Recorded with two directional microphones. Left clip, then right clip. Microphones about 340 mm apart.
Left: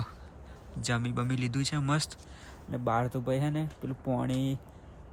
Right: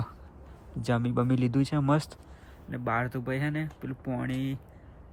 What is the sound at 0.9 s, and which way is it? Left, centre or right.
Speech, centre.